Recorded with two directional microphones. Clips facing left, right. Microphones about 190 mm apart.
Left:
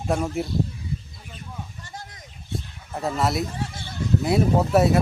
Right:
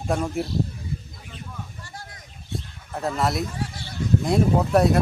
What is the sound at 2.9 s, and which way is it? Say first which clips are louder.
Speech: even; centre (ahead or behind).